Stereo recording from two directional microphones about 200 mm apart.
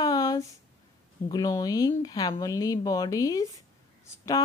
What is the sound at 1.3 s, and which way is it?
Speech, 20° left (ahead or behind).